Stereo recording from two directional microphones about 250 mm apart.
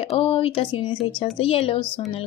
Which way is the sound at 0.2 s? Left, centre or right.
Left.